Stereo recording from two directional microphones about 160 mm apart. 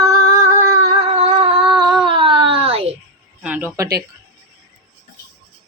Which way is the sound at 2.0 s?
30° right (ahead or behind).